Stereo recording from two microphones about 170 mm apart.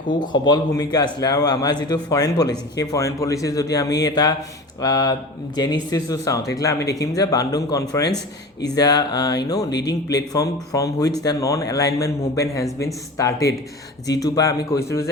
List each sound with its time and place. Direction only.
0.4 s speech: 20° left (ahead or behind)